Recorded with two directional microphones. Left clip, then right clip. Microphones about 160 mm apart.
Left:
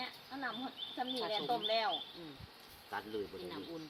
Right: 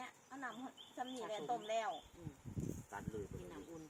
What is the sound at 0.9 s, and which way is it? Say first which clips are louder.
Speech: left 7 dB; 55° right (ahead or behind).